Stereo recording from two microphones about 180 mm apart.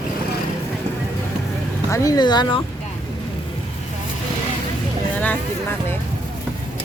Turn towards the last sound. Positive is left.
turn(degrees=10)  # may be behind; listen again after turning